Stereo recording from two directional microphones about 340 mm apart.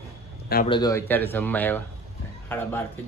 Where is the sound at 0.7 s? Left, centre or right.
Centre.